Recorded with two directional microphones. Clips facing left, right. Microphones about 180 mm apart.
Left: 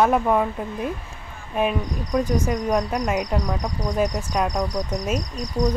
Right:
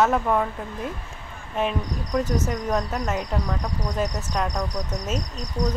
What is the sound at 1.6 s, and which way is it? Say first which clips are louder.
Speech: left 3 dB; 10° left (ahead or behind).